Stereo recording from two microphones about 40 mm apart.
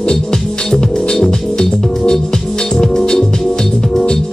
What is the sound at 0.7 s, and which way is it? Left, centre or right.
Music, centre.